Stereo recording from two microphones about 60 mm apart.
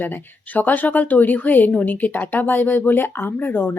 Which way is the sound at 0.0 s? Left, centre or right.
Left.